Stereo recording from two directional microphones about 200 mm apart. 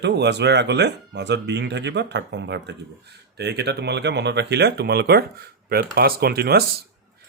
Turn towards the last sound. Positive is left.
turn(degrees=-50)  # may be behind; listen again after turning